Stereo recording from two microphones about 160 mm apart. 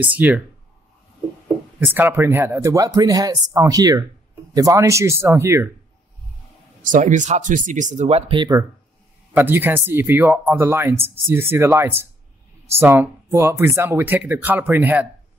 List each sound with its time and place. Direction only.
0.0 s speech: 10° right (ahead or behind)
1.8 s speech: 10° right (ahead or behind)
6.8 s speech: 55° right (ahead or behind); by 8.6 s 25° right (ahead or behind)
9.3 s speech: 15° right (ahead or behind)